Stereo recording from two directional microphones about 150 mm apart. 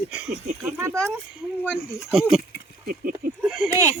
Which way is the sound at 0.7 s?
20° right (ahead or behind).